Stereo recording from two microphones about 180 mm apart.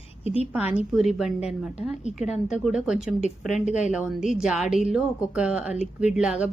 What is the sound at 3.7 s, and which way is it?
Speech, 40° left (ahead or behind).